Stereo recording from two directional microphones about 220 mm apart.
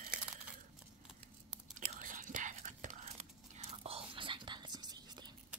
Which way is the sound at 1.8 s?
35° right (ahead or behind).